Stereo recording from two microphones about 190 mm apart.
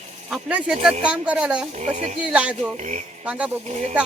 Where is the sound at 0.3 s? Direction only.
5° right (ahead or behind).